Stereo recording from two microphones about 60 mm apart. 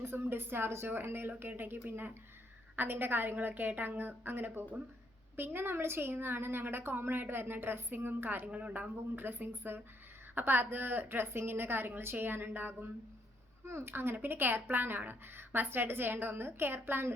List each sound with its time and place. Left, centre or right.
0.0 s speech: right
8.4 s speech: right
9.1 s speech: right
13.7 s speech: right